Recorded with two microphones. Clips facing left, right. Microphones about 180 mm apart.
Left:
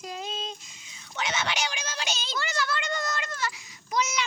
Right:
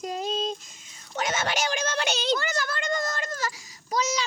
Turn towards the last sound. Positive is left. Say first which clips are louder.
# right 2 dB
turn(degrees=-35)  # may be behind; listen again after turning